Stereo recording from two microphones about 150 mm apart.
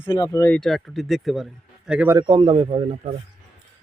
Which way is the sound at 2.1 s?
30° right (ahead or behind).